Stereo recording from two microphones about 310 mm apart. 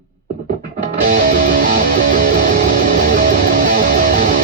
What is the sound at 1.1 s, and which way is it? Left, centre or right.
Music, right.